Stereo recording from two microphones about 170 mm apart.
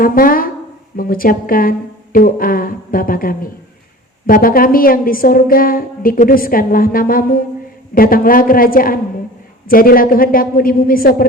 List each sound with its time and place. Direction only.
0.0 s a woman's voice: 55° left (ahead or behind)